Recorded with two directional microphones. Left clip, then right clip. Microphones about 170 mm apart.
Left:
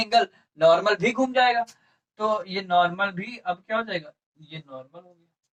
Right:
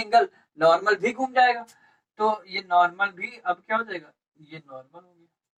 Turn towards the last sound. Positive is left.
turn(degrees=15)  # may be behind; listen again after turning